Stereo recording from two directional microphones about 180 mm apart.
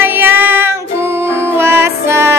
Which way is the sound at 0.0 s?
10° right (ahead or behind).